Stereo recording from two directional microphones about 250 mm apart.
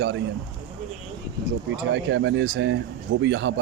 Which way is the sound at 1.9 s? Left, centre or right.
Right.